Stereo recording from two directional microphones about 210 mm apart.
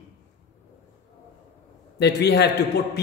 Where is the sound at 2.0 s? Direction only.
50° left (ahead or behind).